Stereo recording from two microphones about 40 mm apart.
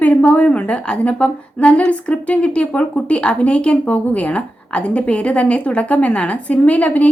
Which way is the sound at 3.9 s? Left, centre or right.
Left.